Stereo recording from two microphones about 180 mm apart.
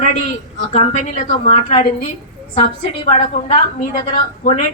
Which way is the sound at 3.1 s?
35° left (ahead or behind).